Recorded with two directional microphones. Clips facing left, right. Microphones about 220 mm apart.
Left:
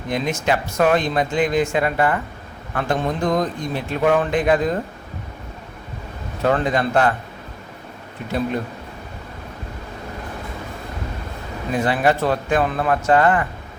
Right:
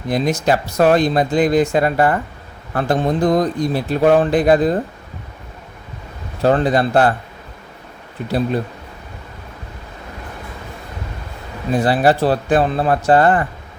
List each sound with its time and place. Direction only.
0.1 s speech: 35° right (ahead or behind)
6.4 s speech: 35° right (ahead or behind)
11.7 s speech: 35° right (ahead or behind)